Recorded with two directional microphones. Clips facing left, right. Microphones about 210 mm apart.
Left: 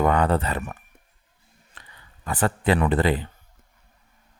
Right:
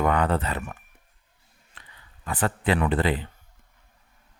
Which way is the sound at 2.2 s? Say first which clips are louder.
Left 3 dB; 40° left (ahead or behind).